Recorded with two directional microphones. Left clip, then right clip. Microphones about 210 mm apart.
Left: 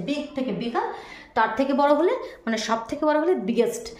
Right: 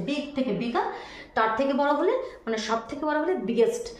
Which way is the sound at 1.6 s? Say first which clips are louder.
Left 4 dB; 50° left (ahead or behind).